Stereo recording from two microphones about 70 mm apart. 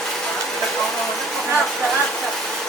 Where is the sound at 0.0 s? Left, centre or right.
Centre.